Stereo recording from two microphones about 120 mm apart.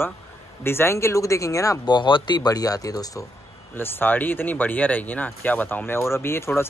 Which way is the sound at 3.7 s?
15° left (ahead or behind).